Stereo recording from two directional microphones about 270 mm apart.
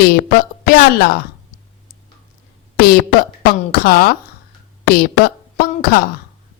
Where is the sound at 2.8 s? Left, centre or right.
Left.